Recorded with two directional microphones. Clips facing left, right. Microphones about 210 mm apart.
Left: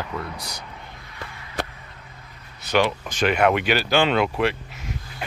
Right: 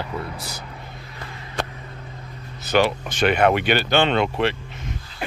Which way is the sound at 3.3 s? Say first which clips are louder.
Right 1 dB; 35° right (ahead or behind).